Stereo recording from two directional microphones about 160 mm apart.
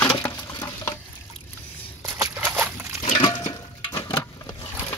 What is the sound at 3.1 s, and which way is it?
Water, 30° left (ahead or behind).